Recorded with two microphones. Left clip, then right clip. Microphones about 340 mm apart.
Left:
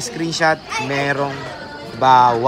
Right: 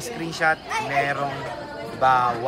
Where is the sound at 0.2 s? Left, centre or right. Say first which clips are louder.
Left 5 dB; centre.